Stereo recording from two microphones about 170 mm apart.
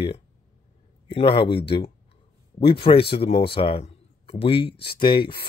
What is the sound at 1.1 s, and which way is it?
Speech, 35° left (ahead or behind).